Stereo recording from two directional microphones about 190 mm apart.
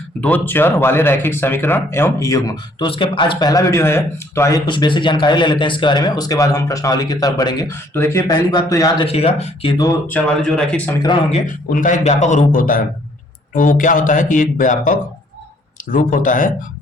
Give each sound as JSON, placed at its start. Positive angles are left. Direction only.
{"t": 0.2, "sound": "speech", "side_deg": 10}
{"t": 9.0, "sound": "speech", "side_deg": 30}
{"t": 10.1, "sound": "speech", "side_deg": 5}
{"t": 11.3, "sound": "a man's voice", "side_deg": 40}